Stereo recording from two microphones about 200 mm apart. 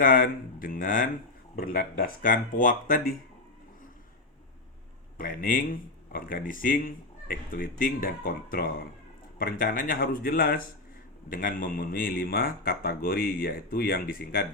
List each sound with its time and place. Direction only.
0.0 s speech: 45° left (ahead or behind)
5.1 s speech: 45° left (ahead or behind)